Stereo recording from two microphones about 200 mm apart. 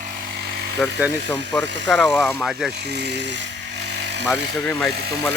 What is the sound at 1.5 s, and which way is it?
Speech, 5° left (ahead or behind).